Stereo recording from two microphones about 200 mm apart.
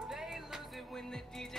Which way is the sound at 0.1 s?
Centre (ahead or behind).